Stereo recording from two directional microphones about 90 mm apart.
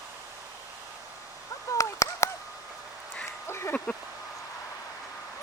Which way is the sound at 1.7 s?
35° left (ahead or behind).